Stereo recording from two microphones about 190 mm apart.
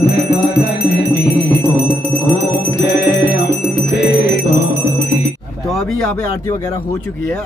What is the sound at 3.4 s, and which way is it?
Music, 60° left (ahead or behind).